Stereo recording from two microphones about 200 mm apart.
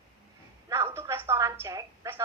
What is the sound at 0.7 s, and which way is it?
Speech, 10° right (ahead or behind).